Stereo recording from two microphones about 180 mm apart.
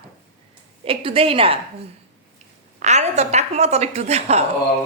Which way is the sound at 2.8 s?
40° right (ahead or behind).